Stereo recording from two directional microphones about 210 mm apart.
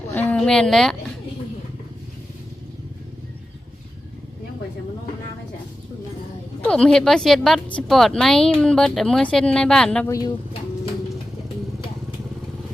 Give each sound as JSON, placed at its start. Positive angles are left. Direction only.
{"t": 0.1, "sound": "speech", "side_deg": 10}
{"t": 6.7, "sound": "a woman's voice", "side_deg": 5}
{"t": 10.1, "sound": "speech", "side_deg": 15}